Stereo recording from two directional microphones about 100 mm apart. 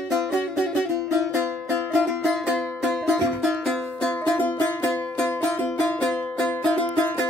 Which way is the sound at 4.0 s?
15° left (ahead or behind).